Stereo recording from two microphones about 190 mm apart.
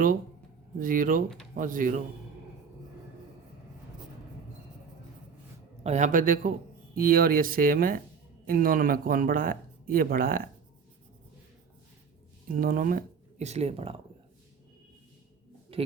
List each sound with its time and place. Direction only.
0.8 s speech: 45° right (ahead or behind)
5.8 s speech: 40° right (ahead or behind)
12.5 s speech: 50° right (ahead or behind); by 14.0 s 30° right (ahead or behind)
15.7 s a sound: 30° right (ahead or behind)